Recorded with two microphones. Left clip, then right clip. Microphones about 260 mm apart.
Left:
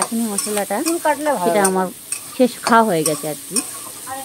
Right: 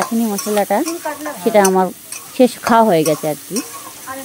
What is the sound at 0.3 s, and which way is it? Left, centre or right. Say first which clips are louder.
Stir: right 5 dB; right.